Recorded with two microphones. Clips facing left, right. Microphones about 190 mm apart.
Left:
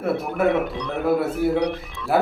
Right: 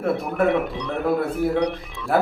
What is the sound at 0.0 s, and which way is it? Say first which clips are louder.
Speech: even; centre (ahead or behind).